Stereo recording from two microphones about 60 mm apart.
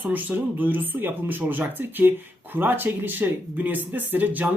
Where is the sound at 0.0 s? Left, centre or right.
Right.